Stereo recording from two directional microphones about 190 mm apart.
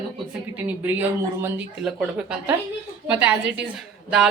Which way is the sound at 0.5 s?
10° right (ahead or behind).